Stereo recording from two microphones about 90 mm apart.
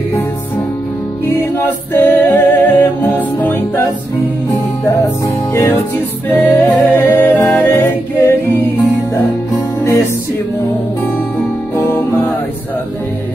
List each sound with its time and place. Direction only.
1.2 s a capella: 20° left (ahead or behind)
5.5 s music: 30° left (ahead or behind)
6.2 s music: 20° left (ahead or behind)
11.7 s music: 25° left (ahead or behind)